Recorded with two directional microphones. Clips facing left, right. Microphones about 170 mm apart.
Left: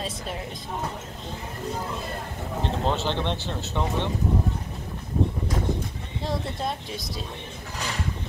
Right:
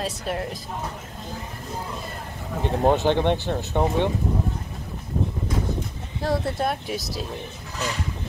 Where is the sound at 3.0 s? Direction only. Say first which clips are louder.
Right 7 dB; 50° right (ahead or behind).